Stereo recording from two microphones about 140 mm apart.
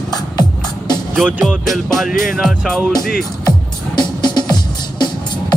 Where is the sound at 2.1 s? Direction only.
85° left.